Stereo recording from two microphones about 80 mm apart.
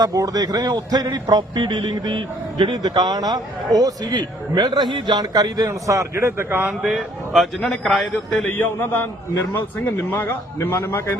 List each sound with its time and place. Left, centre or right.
0.0 s a man's voice: right
4.2 s a man's voice: right
5.1 s a man's voice: right
6.8 s a man's voice: centre
8.4 s a man's voice: left